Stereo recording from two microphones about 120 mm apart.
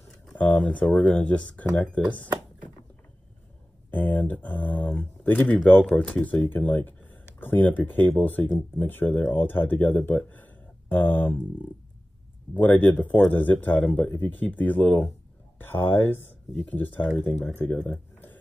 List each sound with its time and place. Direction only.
0.4 s speech: 10° left (ahead or behind)
3.9 s speech: 15° left (ahead or behind)
12.5 s speech: 15° left (ahead or behind)
17.6 s a sound: 15° left (ahead or behind)